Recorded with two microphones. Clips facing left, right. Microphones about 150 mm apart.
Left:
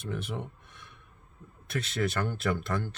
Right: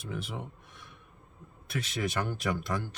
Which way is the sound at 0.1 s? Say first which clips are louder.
Left 2 dB; 5° right (ahead or behind).